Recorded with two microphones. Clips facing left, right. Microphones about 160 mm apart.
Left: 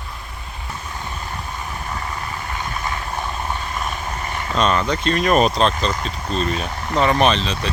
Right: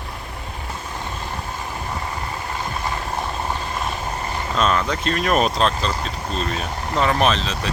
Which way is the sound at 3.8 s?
30° right (ahead or behind).